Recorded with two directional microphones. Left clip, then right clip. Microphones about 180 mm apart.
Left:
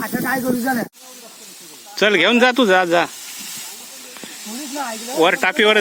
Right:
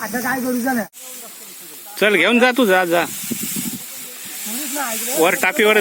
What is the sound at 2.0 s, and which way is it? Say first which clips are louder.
Speech: even; centre (ahead or behind).